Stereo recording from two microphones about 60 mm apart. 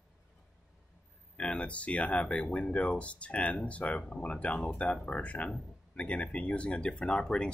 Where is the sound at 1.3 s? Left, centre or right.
Centre.